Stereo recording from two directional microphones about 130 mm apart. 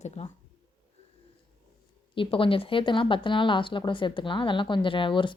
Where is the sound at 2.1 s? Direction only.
40° left (ahead or behind).